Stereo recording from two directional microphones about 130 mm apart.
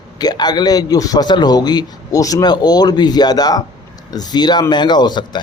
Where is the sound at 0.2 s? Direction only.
30° left (ahead or behind).